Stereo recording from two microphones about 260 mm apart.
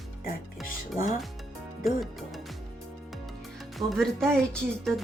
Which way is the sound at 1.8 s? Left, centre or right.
Centre.